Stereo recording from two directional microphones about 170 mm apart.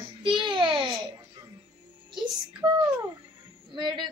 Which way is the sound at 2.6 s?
25° right (ahead or behind).